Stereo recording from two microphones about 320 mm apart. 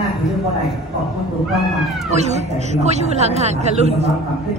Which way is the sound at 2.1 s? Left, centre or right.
Right.